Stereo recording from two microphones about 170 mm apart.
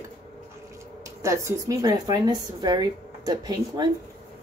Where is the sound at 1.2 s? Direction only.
15° right (ahead or behind).